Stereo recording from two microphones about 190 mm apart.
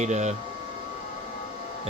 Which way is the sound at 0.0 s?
35° right (ahead or behind).